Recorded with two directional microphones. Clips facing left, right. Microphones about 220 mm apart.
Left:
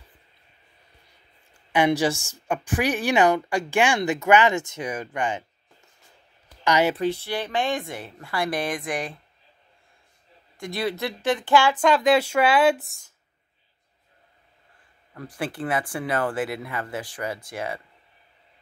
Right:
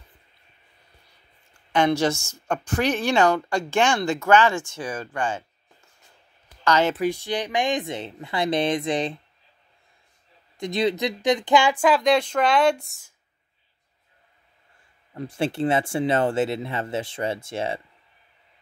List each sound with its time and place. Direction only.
1.7 s speech: 15° left (ahead or behind)
6.6 s speech: 15° left (ahead or behind)
7.0 s speech: 15° right (ahead or behind)
10.6 s speech: 20° right (ahead or behind)
11.8 s speech: centre (ahead or behind)
15.1 s speech: 25° right (ahead or behind)